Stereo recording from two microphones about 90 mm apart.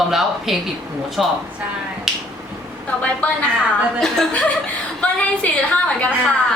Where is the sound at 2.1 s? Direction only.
5° right (ahead or behind).